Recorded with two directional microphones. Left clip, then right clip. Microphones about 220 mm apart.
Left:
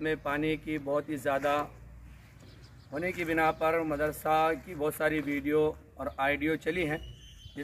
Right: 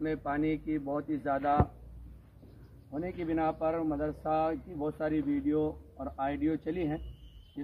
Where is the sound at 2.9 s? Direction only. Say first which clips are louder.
Left 4 dB; 15° left (ahead or behind).